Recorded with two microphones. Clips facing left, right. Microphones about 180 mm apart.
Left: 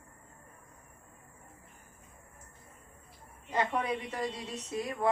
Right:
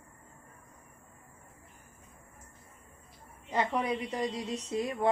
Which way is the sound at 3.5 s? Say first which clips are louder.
Right 1 dB; 20° right (ahead or behind).